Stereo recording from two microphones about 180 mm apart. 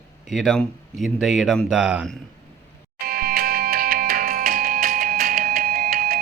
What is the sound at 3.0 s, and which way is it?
Music, 55° right (ahead or behind).